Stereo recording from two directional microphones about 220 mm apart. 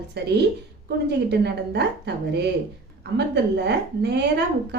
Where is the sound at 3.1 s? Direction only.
50° right (ahead or behind).